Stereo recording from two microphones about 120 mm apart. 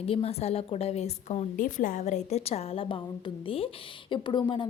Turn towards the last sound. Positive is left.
turn(degrees=40)  # may be behind; listen again after turning